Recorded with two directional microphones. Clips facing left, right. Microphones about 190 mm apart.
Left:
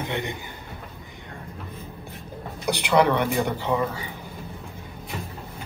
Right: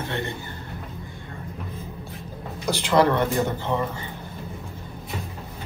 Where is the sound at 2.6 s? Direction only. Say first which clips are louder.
Even; 15° left (ahead or behind).